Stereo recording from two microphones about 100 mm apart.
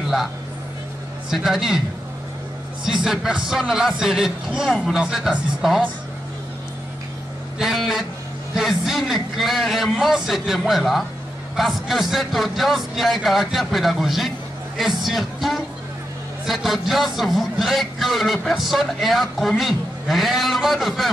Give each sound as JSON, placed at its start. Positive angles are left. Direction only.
{"t": 1.3, "sound": "a man's voice", "side_deg": -5}
{"t": 2.8, "sound": "a man's voice", "side_deg": -5}
{"t": 7.5, "sound": "a man's voice", "side_deg": 0}